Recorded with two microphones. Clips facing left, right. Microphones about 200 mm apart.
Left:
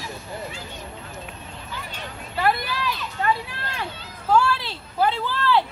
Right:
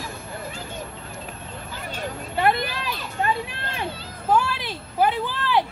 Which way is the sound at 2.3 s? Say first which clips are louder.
Right 1 dB; 20° right (ahead or behind).